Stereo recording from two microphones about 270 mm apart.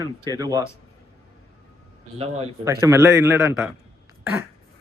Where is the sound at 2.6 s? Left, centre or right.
Centre.